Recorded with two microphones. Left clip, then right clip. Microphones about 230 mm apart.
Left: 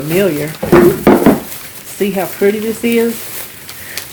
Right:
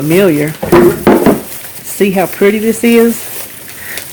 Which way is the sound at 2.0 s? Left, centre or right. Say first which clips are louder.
Right 4 dB; right.